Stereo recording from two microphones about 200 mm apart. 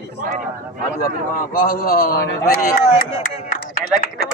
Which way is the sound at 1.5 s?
45° left (ahead or behind).